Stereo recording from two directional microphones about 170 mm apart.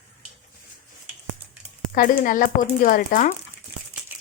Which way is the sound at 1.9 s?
55° left (ahead or behind).